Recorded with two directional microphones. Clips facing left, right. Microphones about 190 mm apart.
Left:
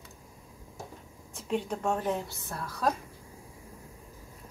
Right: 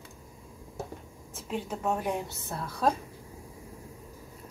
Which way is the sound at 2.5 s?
25° right (ahead or behind).